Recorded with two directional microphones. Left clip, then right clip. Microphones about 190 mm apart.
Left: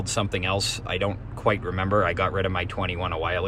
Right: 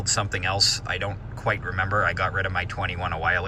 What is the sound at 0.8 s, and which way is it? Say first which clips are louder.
Speech: left 2 dB; 15° right (ahead or behind).